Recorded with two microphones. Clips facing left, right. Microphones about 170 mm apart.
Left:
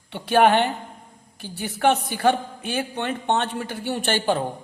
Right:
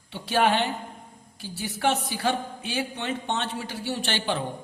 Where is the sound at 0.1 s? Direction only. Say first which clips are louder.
Left 6 dB; 60° left (ahead or behind).